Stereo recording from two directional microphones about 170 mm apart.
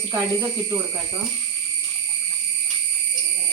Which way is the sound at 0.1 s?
20° right (ahead or behind).